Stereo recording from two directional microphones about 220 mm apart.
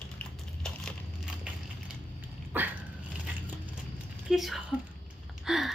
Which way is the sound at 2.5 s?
10° right (ahead or behind).